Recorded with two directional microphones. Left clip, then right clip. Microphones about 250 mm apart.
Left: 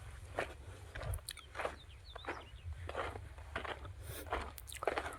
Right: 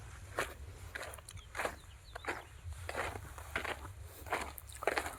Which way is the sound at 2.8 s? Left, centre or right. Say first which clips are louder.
Right 2 dB; right.